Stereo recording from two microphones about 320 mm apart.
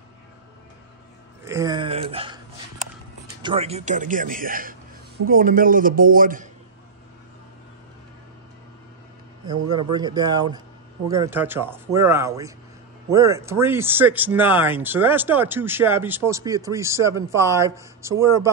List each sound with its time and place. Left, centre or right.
1.4 s a sound: centre
3.4 s a man's voice: centre
9.5 s speech: centre